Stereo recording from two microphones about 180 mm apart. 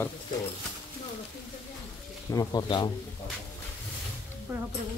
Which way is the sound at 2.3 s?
20° left (ahead or behind).